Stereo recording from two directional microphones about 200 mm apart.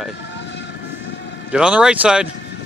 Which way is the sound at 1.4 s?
5° right (ahead or behind).